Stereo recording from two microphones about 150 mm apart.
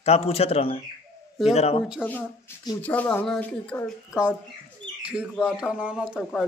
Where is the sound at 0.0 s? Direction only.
40° left (ahead or behind).